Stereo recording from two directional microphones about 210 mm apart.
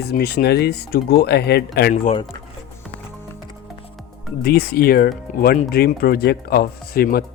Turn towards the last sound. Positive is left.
turn(degrees=45)  # may be behind; listen again after turning